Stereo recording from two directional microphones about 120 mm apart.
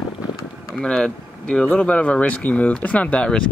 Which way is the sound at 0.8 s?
10° left (ahead or behind).